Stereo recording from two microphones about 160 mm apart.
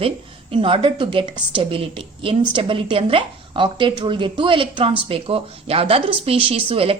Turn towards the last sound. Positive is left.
turn(degrees=-35)  # may be behind; listen again after turning